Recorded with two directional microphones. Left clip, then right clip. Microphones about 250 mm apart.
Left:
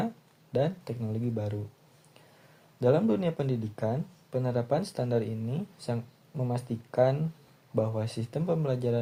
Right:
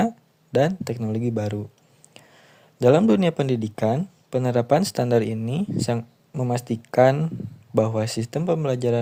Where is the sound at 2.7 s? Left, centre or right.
Right.